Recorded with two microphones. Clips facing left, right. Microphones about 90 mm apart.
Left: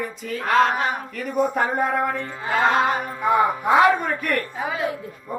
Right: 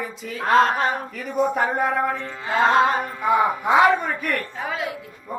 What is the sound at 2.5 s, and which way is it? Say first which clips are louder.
Music: right 2 dB; 30° right (ahead or behind).